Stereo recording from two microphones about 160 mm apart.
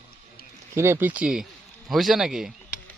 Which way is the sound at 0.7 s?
15° right (ahead or behind).